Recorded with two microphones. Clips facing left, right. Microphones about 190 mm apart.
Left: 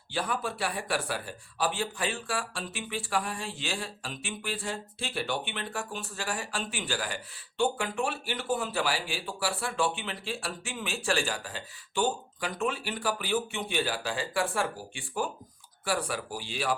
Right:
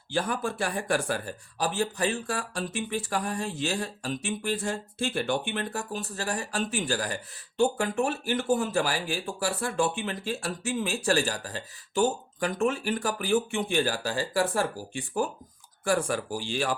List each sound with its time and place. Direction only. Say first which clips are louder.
0.1 s speech: right 3 dB; 45° right (ahead or behind)